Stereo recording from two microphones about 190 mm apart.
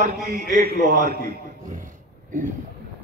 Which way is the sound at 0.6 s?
40° right (ahead or behind).